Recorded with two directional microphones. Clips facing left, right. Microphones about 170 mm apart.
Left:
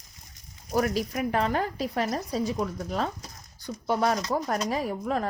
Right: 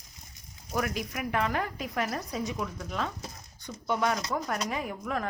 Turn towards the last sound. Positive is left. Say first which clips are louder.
# left 5 dB
turn(degrees=30)  # may be behind; listen again after turning